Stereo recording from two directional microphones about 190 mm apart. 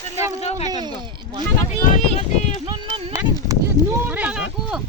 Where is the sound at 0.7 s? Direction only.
20° right (ahead or behind).